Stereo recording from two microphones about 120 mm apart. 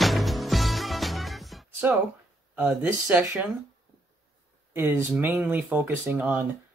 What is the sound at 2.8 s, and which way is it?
Speech, 20° right (ahead or behind).